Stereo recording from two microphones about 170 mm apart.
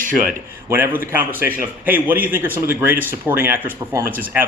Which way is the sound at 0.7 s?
10° right (ahead or behind).